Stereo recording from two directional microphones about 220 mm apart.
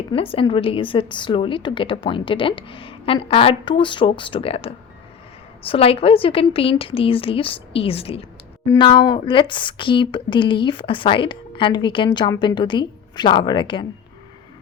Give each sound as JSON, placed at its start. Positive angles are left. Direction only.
{"t": 0.1, "sound": "speech", "side_deg": 25}